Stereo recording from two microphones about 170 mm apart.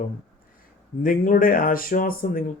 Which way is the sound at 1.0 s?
55° left (ahead or behind).